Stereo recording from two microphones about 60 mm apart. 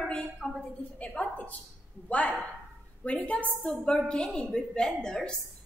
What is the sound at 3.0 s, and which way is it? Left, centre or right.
Speech, left.